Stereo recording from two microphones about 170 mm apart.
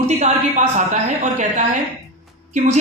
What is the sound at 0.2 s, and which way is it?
A woman's voice, 40° right (ahead or behind).